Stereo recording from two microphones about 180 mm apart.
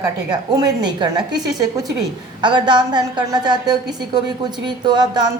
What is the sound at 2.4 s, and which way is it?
A woman's voice, 25° right (ahead or behind).